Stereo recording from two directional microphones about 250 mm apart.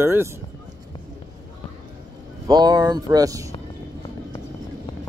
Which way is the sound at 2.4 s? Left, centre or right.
Centre.